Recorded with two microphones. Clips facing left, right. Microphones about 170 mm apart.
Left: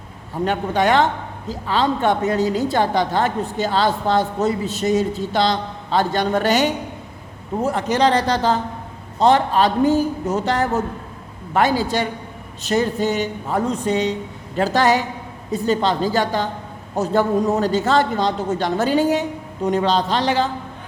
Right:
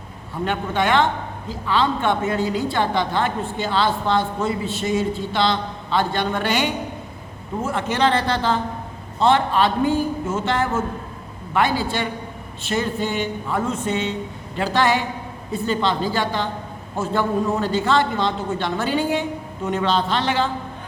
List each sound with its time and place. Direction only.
0.4 s a man's voice: 40° left (ahead or behind)